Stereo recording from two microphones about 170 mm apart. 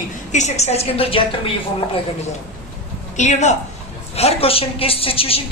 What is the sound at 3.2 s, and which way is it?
A woman's voice, 45° left (ahead or behind).